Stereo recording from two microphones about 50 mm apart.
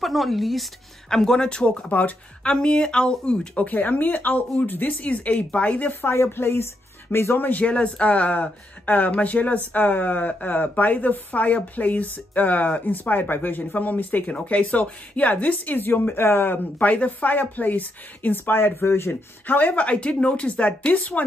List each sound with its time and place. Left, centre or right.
0.0 s speech: centre
1.1 s speech: centre
1.9 s speech: left
2.4 s speech: centre
3.6 s speech: left
6.0 s speech: left
7.3 s speech: left
7.6 s speech: left
16.5 s speech: left
19.4 s speech: left